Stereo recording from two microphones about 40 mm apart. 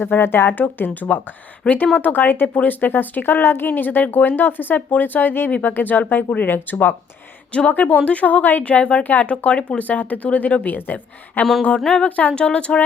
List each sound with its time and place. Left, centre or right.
0.0 s speech: left
0.9 s speech: left
3.7 s speech: left
7.7 s speech: left
9.0 s speech: left
9.4 s speech: left
12.3 s speech: left